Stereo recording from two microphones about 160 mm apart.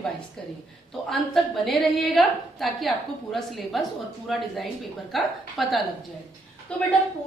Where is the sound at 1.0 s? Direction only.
Centre (ahead or behind).